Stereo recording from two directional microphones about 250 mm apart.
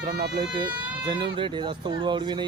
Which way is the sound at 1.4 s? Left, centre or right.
Centre.